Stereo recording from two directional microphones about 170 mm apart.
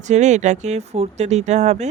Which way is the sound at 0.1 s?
45° right (ahead or behind).